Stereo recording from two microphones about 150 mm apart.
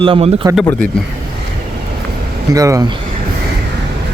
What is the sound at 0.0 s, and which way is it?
Speech, 35° right (ahead or behind).